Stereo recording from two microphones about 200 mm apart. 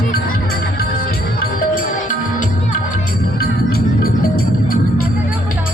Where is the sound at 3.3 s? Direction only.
50° left (ahead or behind).